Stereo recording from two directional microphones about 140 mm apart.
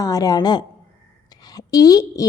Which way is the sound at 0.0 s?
25° left (ahead or behind).